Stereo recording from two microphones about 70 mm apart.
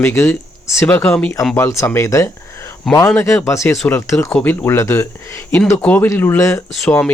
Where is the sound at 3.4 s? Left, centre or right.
Left.